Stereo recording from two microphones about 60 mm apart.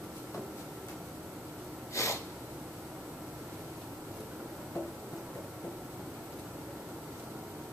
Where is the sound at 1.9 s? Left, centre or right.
Left.